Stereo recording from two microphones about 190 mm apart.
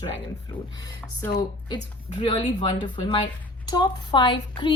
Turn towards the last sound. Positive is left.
turn(degrees=25)  # may be behind; listen again after turning